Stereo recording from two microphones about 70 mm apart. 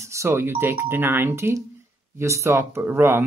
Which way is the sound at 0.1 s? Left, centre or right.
Right.